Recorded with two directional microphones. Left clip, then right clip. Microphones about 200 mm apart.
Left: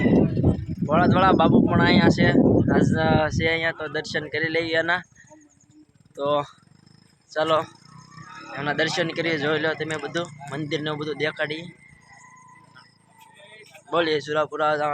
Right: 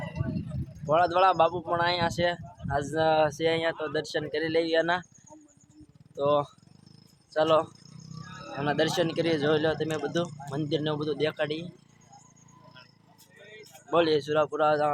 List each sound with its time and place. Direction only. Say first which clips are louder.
0.1 s a sound: left 17 dB; 15° left (ahead or behind)
0.9 s speech: left 3 dB; centre (ahead or behind)
6.1 s speech: left 2 dB; centre (ahead or behind)
7.9 s wild animals: left 4 dB; 25° left (ahead or behind)
8.5 s speech: left 3 dB; centre (ahead or behind)
13.9 s speech: left 2 dB; centre (ahead or behind)